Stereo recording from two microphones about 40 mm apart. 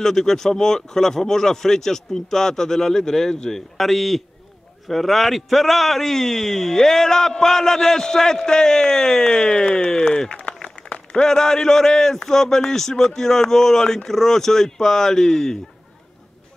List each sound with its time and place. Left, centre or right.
0.0 s a man's voice: centre
10.3 s applause: left
11.1 s a man's voice: centre